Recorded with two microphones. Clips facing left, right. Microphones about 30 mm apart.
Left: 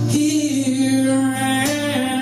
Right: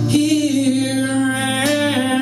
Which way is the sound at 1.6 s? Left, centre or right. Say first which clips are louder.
Right 3 dB; right.